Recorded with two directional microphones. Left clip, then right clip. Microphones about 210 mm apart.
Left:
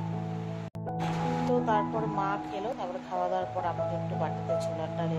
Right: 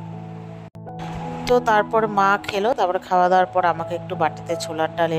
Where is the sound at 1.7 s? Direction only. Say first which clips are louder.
Right 11 dB; 55° right (ahead or behind).